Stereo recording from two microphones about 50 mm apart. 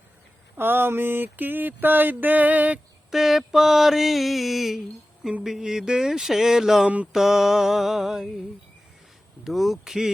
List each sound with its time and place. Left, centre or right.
0.5 s mantra: right
3.1 s mantra: centre
5.4 s a sound: centre
6.8 s mantra: right
7.1 s a sound: centre
9.4 s mantra: centre